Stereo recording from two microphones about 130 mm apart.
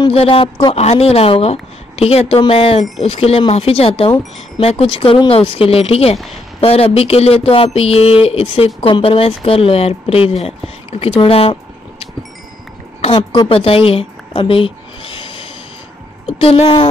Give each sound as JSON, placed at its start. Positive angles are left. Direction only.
{"t": 0.1, "sound": "speech", "side_deg": 45}
{"t": 13.5, "sound": "a sound", "side_deg": 45}
{"t": 16.3, "sound": "speech", "side_deg": 50}